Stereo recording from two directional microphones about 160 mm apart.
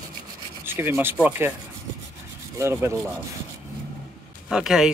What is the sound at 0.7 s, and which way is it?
Speech, 15° right (ahead or behind).